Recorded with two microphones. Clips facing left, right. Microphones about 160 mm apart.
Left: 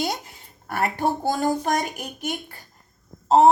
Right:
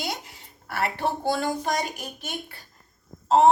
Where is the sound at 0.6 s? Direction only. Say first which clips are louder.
Left 3 dB; 45° left (ahead or behind).